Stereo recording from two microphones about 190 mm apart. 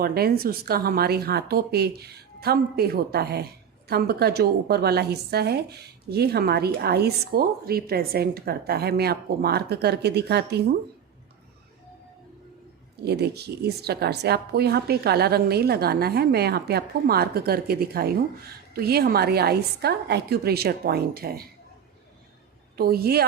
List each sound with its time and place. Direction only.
0.0 s a woman's voice: 55° right (ahead or behind)
13.0 s a woman's voice: 60° right (ahead or behind)
22.8 s a woman's voice: 55° right (ahead or behind)